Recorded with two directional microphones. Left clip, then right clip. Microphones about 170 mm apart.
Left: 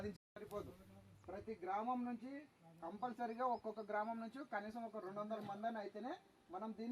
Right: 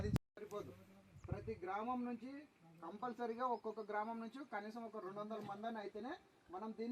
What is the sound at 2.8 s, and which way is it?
A man's voice, 25° left (ahead or behind).